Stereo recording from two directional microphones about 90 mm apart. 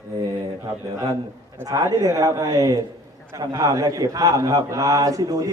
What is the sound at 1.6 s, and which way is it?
A man's voice, 35° right (ahead or behind).